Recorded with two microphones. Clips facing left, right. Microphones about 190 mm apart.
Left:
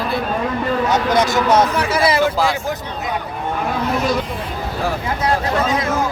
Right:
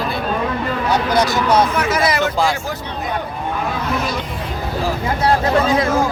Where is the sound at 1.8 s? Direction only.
30° left (ahead or behind).